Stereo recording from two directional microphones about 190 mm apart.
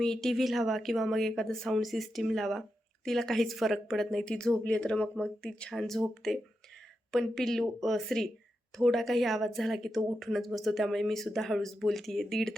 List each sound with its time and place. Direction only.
0.0 s speech: centre (ahead or behind)